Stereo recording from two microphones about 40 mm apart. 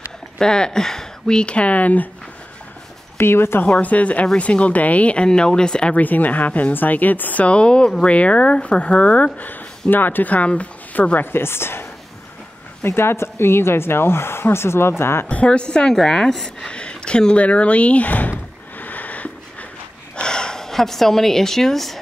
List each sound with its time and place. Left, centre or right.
0.4 s speech: centre; by 2.0 s left
3.2 s speech: left
3.8 s speech: left
5.9 s speech: left
7.4 s speech: left
9.5 s speech: left
10.3 s speech: left
11.1 s a woman's voice: left
15.2 s speech: left
15.9 s a woman's voice: centre; by 18.3 s left
18.8 s sniff: left
20.2 s a woman's voice: centre